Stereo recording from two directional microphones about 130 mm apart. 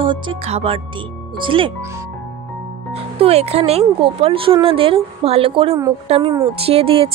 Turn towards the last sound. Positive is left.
turn(degrees=-45)  # may be behind; listen again after turning